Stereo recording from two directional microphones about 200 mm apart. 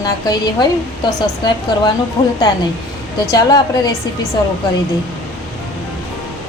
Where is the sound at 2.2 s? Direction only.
30° left (ahead or behind).